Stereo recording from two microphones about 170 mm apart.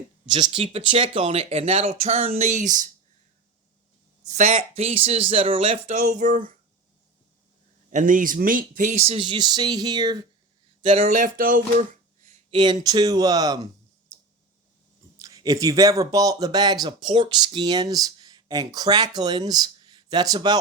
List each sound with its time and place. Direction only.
0.3 s speech: 25° right (ahead or behind); by 2.9 s 50° right (ahead or behind)
4.2 s speech: 45° right (ahead or behind)
7.9 s speech: 50° right (ahead or behind); by 10.2 s 25° right (ahead or behind)
10.8 s speech: 35° right (ahead or behind)
12.5 s speech: 25° right (ahead or behind)
15.2 s speech: 20° right (ahead or behind)